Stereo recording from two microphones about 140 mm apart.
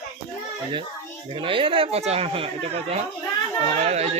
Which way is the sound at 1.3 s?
40° right (ahead or behind).